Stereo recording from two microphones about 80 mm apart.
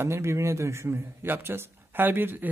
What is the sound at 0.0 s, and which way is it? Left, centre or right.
A man's voice, right.